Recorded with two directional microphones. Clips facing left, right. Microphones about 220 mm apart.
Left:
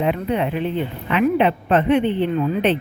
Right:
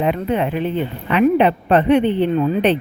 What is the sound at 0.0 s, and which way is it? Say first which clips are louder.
Speech: right 2 dB; 50° right (ahead or behind).